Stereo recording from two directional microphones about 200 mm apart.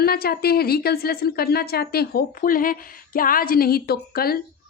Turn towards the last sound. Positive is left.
turn(degrees=50)  # may be behind; listen again after turning